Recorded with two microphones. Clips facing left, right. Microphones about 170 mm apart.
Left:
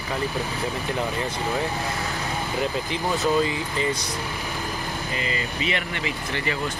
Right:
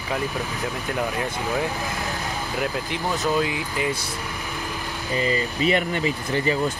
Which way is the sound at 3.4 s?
5° right (ahead or behind).